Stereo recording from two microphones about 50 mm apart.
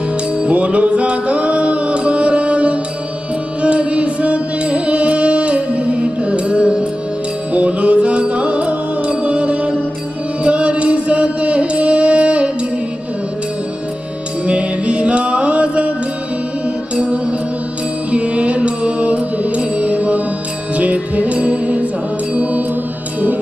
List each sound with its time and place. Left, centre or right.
0.4 s music: right
14.4 s music: right
16.9 s music: right
22.3 s mantra: right